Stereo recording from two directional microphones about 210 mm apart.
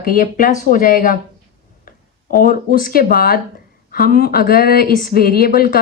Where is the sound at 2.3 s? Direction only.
40° left (ahead or behind).